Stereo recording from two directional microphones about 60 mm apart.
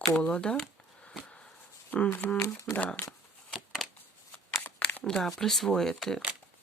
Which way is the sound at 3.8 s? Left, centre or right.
Centre.